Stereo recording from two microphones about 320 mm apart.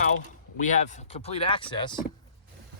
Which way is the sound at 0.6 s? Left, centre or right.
Left.